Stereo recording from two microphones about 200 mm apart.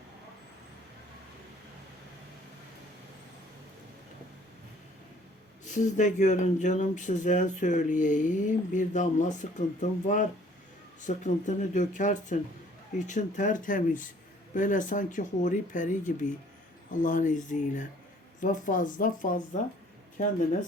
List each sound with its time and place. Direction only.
5.6 s speech: 40° left (ahead or behind)